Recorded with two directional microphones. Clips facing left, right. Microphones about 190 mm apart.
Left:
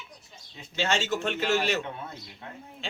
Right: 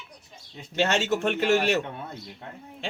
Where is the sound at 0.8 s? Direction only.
65° right (ahead or behind).